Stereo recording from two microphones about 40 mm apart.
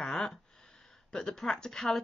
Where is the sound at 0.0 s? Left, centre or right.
Centre.